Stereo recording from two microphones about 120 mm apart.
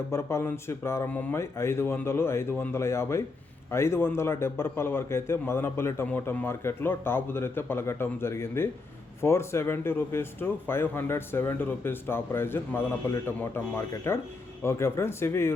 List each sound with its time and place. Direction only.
0.1 s speech: 25° left (ahead or behind)